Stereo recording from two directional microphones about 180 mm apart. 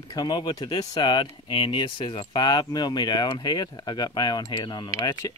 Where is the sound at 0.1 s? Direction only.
25° left (ahead or behind).